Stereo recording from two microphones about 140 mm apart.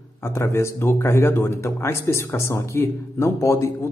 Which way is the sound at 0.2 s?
20° left (ahead or behind).